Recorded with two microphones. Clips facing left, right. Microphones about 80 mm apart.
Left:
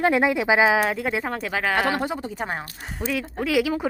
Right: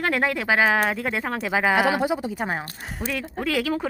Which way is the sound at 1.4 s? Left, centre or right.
Centre.